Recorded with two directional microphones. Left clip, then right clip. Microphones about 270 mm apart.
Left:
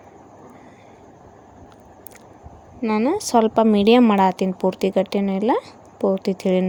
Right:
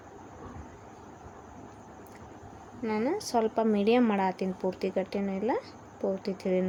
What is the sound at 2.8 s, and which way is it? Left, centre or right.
A woman's voice, left.